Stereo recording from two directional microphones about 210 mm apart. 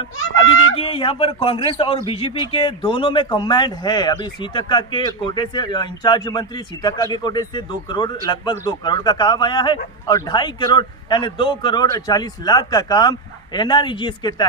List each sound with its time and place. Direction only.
0.7 s speech: 25° left (ahead or behind)